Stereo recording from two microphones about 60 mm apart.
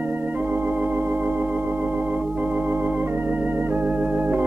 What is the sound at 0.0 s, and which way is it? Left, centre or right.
Organ, right.